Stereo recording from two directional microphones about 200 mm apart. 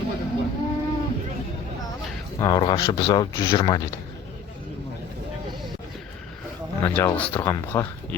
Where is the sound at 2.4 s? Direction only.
20° left (ahead or behind).